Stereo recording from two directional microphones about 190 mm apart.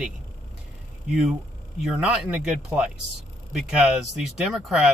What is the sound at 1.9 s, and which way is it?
Speech, 5° right (ahead or behind).